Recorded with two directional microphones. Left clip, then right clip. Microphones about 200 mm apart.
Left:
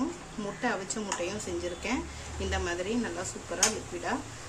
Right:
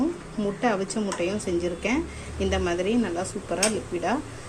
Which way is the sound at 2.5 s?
15° right (ahead or behind).